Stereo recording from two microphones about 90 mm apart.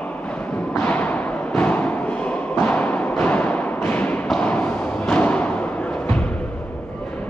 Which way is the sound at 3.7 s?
20° left (ahead or behind).